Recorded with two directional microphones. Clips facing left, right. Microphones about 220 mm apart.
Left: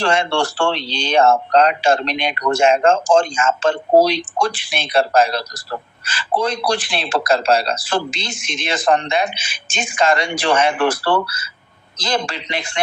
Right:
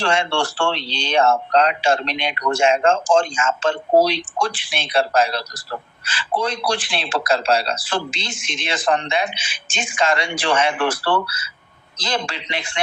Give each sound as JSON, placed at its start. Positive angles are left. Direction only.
{"t": 0.0, "sound": "speech", "side_deg": 40}